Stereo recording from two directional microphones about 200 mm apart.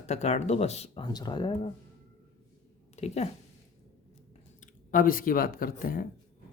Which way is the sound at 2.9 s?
35° left (ahead or behind).